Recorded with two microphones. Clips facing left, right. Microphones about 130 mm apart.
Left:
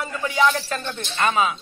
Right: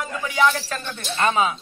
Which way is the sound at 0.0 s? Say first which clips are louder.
Even; centre (ahead or behind).